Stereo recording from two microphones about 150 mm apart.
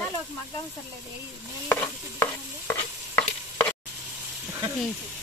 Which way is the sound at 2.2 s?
15° left (ahead or behind).